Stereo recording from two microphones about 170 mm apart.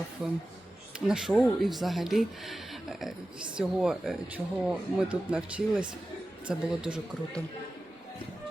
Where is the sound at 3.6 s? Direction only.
5° right (ahead or behind).